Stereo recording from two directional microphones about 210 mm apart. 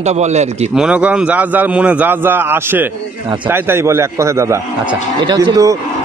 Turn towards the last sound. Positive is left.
turn(degrees=-15)  # may be behind; listen again after turning